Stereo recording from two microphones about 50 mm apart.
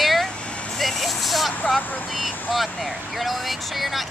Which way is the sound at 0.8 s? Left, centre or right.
Centre.